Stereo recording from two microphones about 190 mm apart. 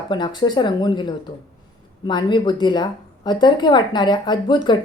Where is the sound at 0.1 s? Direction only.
25° left (ahead or behind).